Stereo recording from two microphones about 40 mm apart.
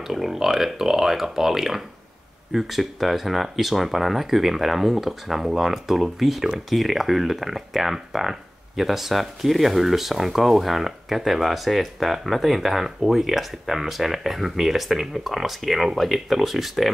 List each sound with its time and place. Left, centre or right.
0.0 s speech: centre